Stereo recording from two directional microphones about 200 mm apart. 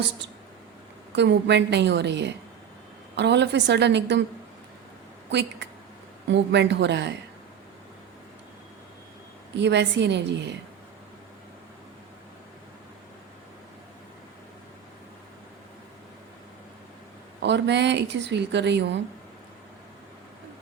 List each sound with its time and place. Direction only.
1.1 s speech: 60° right (ahead or behind)
5.3 s speech: 60° right (ahead or behind)
9.6 s speech: 60° right (ahead or behind)
17.4 s speech: 60° right (ahead or behind)